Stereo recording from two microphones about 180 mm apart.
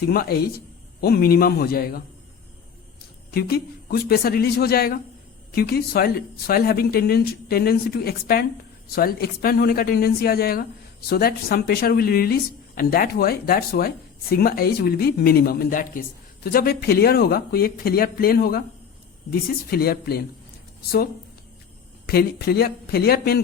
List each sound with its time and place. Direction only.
0.1 s speech: 60° left (ahead or behind)
3.3 s speech: 60° left (ahead or behind)
22.0 s speech: 60° left (ahead or behind)